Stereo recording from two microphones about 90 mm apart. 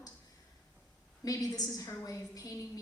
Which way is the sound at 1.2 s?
40° left (ahead or behind).